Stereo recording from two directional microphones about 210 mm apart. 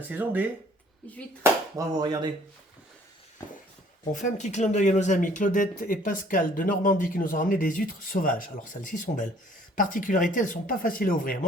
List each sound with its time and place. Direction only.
0.1 s speech: 10° right (ahead or behind)
1.7 s speech: 20° right (ahead or behind)
4.1 s speech: 35° left (ahead or behind)